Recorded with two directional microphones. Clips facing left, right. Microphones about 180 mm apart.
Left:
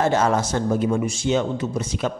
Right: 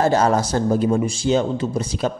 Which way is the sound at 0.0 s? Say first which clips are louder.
Right 2 dB; 35° right (ahead or behind).